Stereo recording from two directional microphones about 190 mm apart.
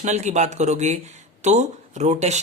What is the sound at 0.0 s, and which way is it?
Speech, 40° right (ahead or behind).